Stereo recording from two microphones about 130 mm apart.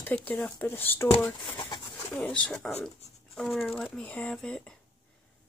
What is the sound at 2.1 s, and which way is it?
Speech, 10° left (ahead or behind).